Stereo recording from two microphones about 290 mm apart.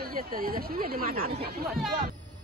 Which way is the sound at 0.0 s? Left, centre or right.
Right.